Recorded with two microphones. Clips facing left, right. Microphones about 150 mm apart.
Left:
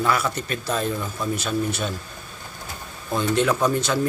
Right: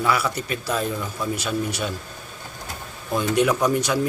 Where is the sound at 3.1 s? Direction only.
10° right (ahead or behind).